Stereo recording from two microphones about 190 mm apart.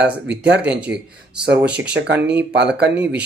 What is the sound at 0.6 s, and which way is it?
Speech, 5° right (ahead or behind).